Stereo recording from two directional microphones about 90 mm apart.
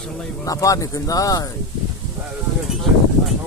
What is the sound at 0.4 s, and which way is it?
Speech, 40° left (ahead or behind).